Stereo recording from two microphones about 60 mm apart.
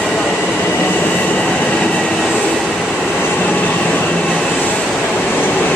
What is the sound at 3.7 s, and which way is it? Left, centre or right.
Vehicle, centre.